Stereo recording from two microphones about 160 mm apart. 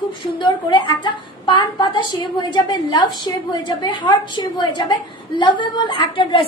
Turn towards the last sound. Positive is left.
turn(degrees=30)  # may be behind; listen again after turning